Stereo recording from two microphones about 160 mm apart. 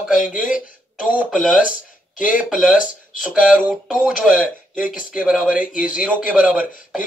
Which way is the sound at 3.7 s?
5° right (ahead or behind).